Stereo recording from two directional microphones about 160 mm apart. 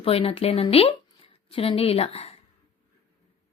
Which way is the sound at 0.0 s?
35° left (ahead or behind).